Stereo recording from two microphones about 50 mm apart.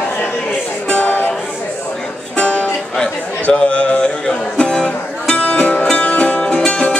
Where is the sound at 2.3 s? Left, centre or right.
Left.